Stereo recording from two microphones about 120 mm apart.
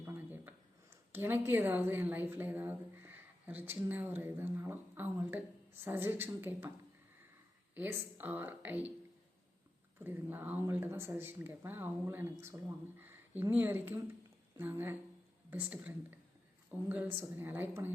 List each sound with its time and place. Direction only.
0.0 s a woman's voice: 15° right (ahead or behind)
7.8 s speech: 15° right (ahead or behind)
10.0 s speech: 15° right (ahead or behind)